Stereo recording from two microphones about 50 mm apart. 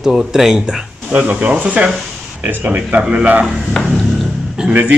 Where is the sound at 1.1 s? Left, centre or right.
Right.